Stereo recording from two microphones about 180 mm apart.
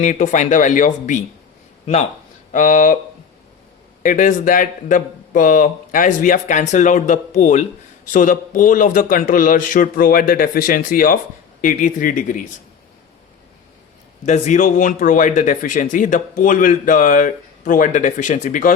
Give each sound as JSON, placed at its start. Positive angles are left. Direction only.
{"t": 0.0, "sound": "speech", "side_deg": 40}
{"t": 2.5, "sound": "speech", "side_deg": 45}
{"t": 4.0, "sound": "speech", "side_deg": 50}
{"t": 14.3, "sound": "speech", "side_deg": 40}